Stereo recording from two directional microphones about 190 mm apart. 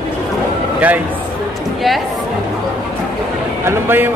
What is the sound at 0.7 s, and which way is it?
Speech, 10° right (ahead or behind).